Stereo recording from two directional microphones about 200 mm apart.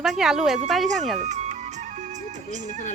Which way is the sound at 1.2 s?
35° right (ahead or behind).